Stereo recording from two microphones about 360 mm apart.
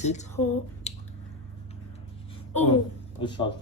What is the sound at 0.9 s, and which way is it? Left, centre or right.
Squish, centre.